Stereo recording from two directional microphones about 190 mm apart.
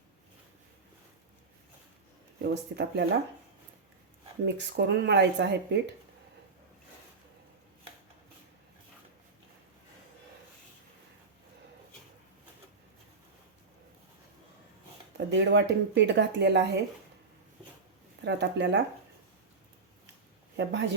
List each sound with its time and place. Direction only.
2.7 s speech: 60° right (ahead or behind)
4.4 s speech: 65° right (ahead or behind)
15.3 s speech: 65° right (ahead or behind)
18.3 s speech: 65° right (ahead or behind)
20.6 s speech: 65° right (ahead or behind)